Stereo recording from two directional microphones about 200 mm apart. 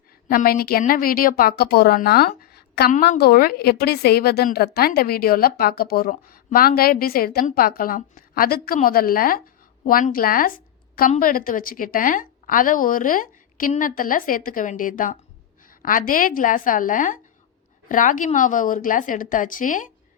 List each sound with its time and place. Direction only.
0.3 s a woman's voice: 45° left (ahead or behind)